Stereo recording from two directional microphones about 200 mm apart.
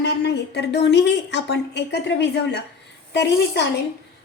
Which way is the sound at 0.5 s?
55° left (ahead or behind).